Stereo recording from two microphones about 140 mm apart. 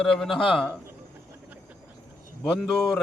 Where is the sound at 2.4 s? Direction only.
5° left (ahead or behind).